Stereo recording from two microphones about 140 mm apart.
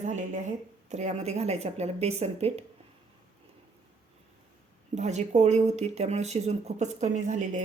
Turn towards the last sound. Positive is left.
turn(degrees=-60)  # may be behind; listen again after turning